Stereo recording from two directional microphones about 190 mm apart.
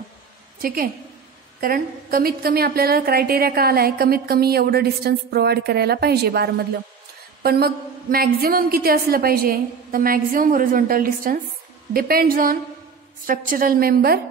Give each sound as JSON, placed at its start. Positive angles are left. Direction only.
{"t": 0.6, "sound": "a woman's voice", "side_deg": -50}